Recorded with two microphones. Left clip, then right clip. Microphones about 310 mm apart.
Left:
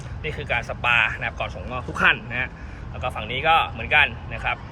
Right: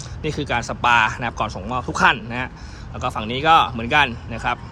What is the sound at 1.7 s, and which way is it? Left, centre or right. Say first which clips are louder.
Speech: right 2 dB; centre.